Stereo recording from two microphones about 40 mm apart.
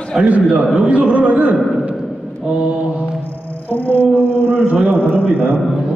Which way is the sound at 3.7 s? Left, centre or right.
Left.